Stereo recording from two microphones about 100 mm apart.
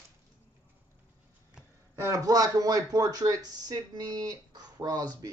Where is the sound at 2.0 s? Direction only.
35° right (ahead or behind).